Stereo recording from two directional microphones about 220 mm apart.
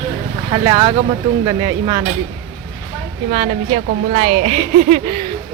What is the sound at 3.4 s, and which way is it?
A woman's voice, 30° right (ahead or behind).